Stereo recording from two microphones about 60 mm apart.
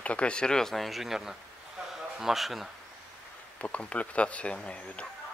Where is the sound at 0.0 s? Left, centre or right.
Left; by 2.7 s centre.